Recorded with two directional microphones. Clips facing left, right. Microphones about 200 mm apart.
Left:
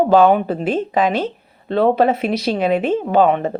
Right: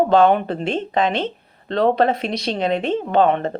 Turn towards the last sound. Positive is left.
turn(degrees=5)  # may be behind; listen again after turning